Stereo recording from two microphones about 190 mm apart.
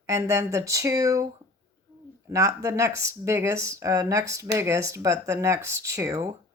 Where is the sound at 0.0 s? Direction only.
15° right (ahead or behind).